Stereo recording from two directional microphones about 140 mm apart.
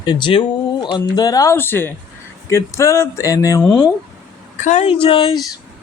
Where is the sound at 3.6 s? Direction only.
5° left (ahead or behind).